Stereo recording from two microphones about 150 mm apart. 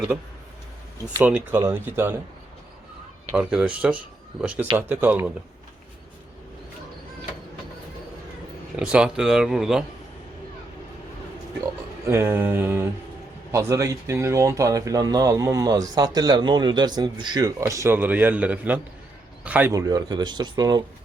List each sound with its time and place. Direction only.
1.2 s speech: 10° right (ahead or behind)
3.3 s speech: 5° right (ahead or behind)
8.7 s speech: 5° right (ahead or behind)
12.0 s speech: 15° right (ahead or behind)
19.7 s speech: 25° right (ahead or behind)